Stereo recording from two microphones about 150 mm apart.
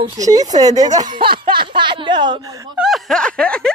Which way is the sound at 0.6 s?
25° right (ahead or behind).